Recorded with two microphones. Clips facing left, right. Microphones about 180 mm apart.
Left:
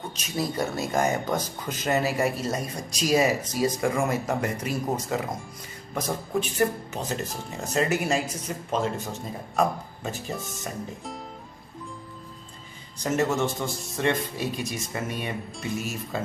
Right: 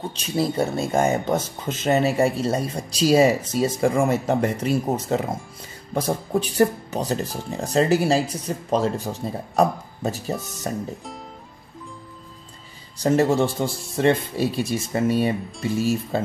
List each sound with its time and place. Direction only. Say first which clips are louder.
0.1 s speech: right 5 dB; 30° right (ahead or behind)
13.0 s speech: right 6 dB; 35° right (ahead or behind)